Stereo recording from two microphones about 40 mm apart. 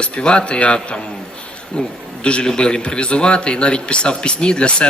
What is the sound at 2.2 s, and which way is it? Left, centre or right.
Speech, left.